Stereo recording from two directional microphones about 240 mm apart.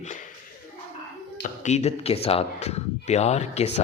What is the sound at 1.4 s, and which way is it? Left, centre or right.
Speech, left.